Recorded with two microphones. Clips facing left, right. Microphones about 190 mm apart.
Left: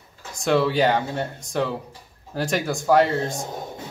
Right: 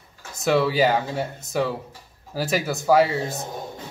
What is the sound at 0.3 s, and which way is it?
Speech, 5° right (ahead or behind).